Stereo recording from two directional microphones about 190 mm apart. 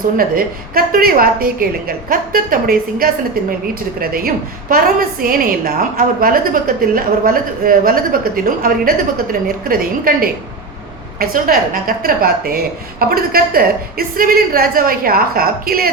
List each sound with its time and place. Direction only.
0.2 s a woman's voice: 50° right (ahead or behind)